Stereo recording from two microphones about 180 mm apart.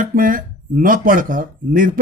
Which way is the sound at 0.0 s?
50° right (ahead or behind).